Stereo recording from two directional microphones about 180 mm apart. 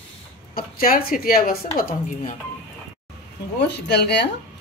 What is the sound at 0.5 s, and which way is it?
A woman's voice, 55° left (ahead or behind).